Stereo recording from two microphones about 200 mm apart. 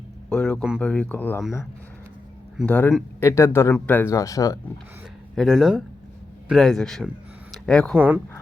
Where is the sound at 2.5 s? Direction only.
5° left (ahead or behind).